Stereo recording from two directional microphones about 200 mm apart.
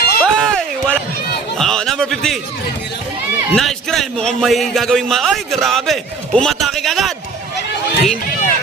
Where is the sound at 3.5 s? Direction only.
Centre (ahead or behind).